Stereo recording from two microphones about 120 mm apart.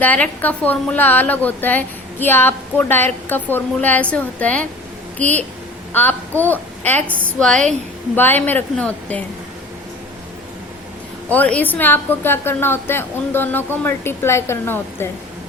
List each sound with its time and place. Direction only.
0.0 s a woman's voice: 15° left (ahead or behind)
11.3 s a woman's voice: 10° left (ahead or behind)